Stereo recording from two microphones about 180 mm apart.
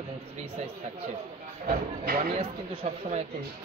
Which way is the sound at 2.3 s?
30° right (ahead or behind).